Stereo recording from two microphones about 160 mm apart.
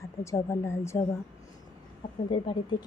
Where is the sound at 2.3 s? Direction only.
35° left (ahead or behind).